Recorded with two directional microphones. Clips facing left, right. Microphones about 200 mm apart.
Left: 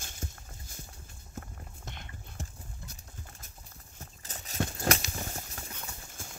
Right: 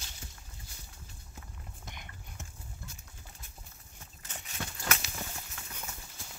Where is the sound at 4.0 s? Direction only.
40° left (ahead or behind).